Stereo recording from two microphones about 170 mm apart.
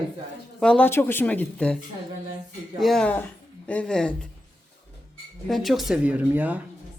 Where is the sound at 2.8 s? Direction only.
Centre (ahead or behind).